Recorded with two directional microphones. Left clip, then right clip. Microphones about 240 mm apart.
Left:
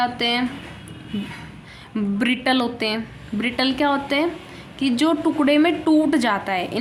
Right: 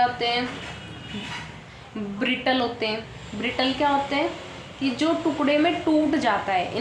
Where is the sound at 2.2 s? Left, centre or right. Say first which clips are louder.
Left 2 dB; left.